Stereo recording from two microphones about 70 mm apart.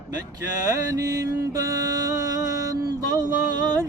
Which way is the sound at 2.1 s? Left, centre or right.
Right.